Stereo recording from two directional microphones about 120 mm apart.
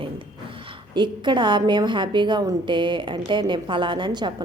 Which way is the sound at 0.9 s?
40° right (ahead or behind).